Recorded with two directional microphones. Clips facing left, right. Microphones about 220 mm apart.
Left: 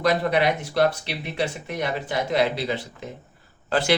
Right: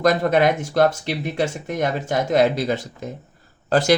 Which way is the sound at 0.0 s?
45° right (ahead or behind).